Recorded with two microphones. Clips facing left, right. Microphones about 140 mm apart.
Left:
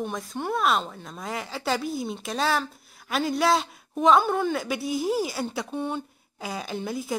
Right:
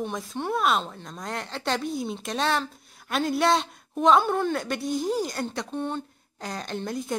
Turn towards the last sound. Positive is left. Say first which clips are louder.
# even
turn(degrees=5)  # may be behind; listen again after turning